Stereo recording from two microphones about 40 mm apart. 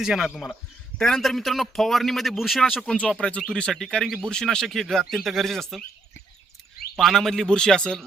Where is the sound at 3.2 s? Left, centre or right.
Left.